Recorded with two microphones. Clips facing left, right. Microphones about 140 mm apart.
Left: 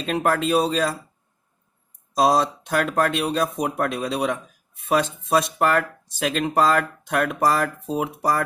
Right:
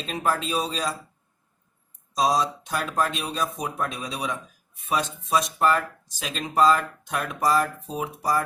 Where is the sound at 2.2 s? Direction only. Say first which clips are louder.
Left 4 dB; 60° left (ahead or behind).